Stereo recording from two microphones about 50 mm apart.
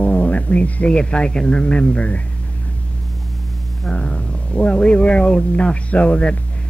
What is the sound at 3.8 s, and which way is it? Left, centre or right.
Speech, left.